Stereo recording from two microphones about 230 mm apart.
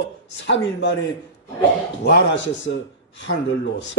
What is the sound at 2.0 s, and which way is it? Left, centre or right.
Speech, left.